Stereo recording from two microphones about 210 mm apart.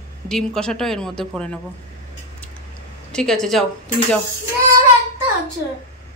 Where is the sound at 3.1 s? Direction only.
Centre (ahead or behind).